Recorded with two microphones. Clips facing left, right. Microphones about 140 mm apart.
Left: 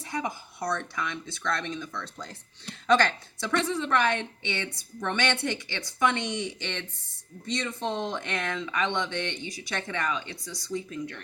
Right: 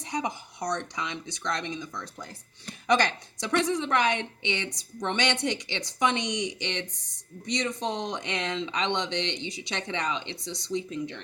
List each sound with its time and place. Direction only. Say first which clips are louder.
0.0 s a woman's voice: right 1 dB; 20° right (ahead or behind)